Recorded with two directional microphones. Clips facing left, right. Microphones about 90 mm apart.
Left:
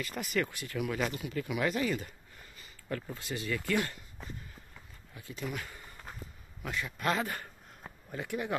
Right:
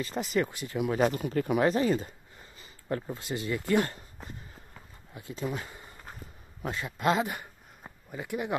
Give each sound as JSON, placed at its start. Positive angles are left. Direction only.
{"t": 0.0, "sound": "speech", "side_deg": -25}
{"t": 0.9, "sound": "speech", "side_deg": -40}
{"t": 5.3, "sound": "a sound", "side_deg": -25}
{"t": 6.6, "sound": "speech", "side_deg": -30}